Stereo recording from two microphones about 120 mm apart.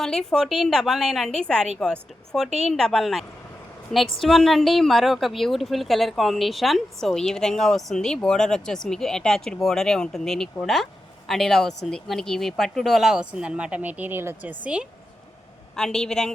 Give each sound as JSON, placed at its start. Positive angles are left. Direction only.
{"t": 0.0, "sound": "a woman's voice", "side_deg": 5}
{"t": 15.7, "sound": "a woman's voice", "side_deg": 5}